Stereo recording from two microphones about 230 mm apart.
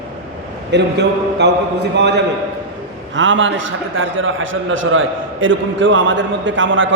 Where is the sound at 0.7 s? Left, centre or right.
Right.